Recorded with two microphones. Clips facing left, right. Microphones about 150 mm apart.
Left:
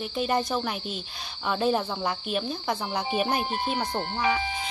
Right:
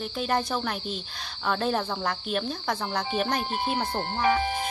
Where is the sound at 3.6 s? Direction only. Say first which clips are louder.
Right 1 dB; 5° right (ahead or behind).